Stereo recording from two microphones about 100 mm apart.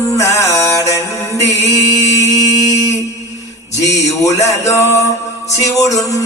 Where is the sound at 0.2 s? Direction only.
30° left (ahead or behind).